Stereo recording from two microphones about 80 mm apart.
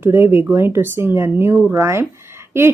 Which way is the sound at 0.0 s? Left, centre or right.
Right.